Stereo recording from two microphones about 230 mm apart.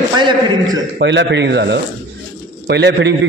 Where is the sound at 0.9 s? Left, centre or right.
Right.